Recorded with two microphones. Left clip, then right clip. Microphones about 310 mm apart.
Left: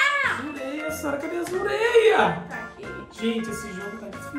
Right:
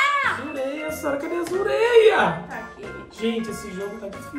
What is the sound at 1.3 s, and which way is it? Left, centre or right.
Speech, centre.